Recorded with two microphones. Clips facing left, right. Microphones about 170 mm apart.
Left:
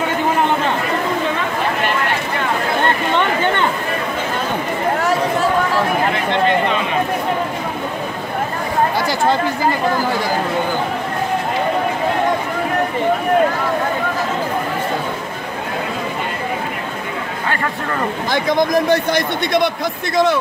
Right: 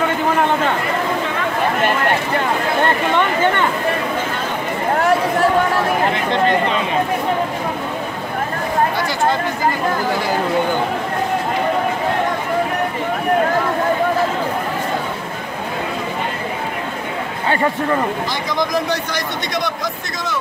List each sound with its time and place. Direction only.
18.3 s a man's voice: 55° left (ahead or behind)